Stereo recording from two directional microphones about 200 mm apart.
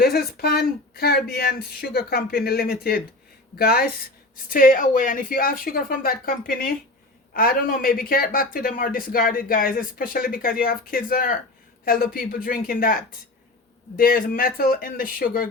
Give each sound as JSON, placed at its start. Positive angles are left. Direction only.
{"t": 0.0, "sound": "speech", "side_deg": 50}